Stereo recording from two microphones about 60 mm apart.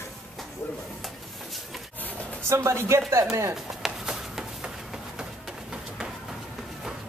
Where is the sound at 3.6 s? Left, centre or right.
Centre.